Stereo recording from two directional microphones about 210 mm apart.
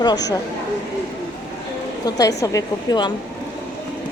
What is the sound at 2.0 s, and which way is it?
A woman's voice, 15° left (ahead or behind).